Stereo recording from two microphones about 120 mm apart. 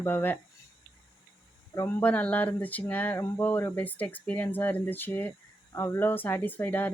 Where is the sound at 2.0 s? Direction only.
10° left (ahead or behind).